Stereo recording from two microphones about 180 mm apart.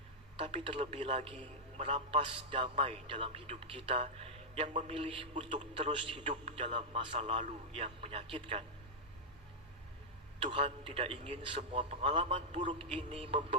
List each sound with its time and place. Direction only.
0.3 s a man's voice: 30° right (ahead or behind)
10.4 s a man's voice: 30° right (ahead or behind)